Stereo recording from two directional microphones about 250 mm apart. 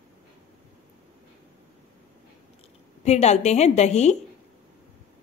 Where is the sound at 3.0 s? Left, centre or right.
Left.